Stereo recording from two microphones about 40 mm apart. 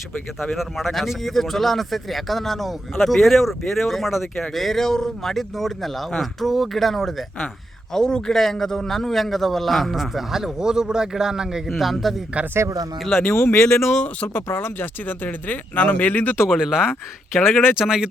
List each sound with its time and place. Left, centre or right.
0.5 s a man's voice: centre
11.7 s a man's voice: centre
13.1 s speech: left
13.9 s speech: left
14.5 s speech: left
16.6 s speech: centre
17.5 s speech: left
17.7 s speech: centre